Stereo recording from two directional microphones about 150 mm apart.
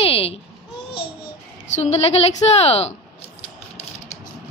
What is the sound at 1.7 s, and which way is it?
A woman's voice, 45° left (ahead or behind).